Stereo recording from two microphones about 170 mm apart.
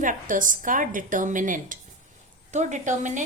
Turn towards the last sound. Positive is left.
turn(degrees=-45)  # may be behind; listen again after turning